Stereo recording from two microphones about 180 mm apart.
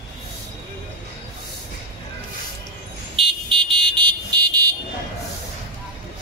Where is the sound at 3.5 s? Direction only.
25° right (ahead or behind).